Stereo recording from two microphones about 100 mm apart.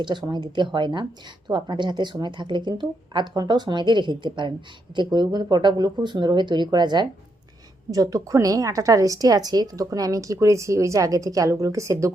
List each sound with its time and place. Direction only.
0.0 s speech: 50° right (ahead or behind)
7.9 s a woman's voice: 35° right (ahead or behind)